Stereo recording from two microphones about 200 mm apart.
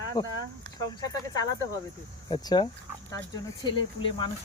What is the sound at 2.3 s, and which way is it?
Speech, 20° left (ahead or behind).